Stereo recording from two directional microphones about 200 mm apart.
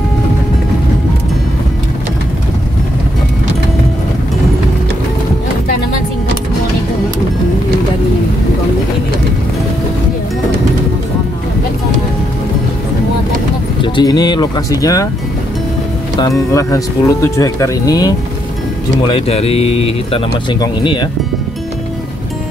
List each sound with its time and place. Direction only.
13.8 s speech: 20° left (ahead or behind)
16.2 s speech: 15° left (ahead or behind)
19.0 s speech: 30° left (ahead or behind)